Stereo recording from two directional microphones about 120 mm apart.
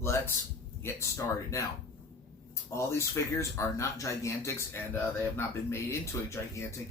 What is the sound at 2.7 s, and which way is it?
Speech, 25° left (ahead or behind).